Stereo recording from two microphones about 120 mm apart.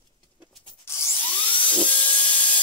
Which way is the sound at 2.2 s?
40° left (ahead or behind).